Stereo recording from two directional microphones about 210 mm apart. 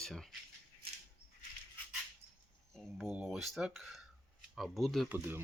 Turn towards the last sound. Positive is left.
turn(degrees=-10)  # may be behind; listen again after turning